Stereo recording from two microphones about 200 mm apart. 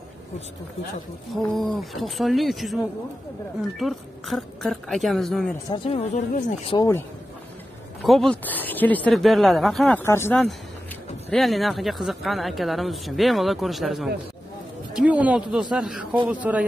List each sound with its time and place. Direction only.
1.3 s speech: centre (ahead or behind)
5.7 s speech: 30° left (ahead or behind)
8.0 s speech: centre (ahead or behind)
11.2 s speech: centre (ahead or behind)